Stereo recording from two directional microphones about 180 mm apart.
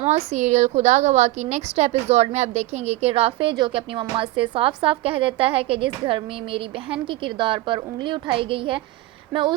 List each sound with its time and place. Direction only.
0.0 s a woman's voice: 40° right (ahead or behind)